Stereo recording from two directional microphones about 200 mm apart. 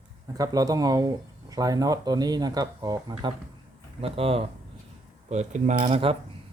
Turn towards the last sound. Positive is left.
turn(degrees=-30)  # may be behind; listen again after turning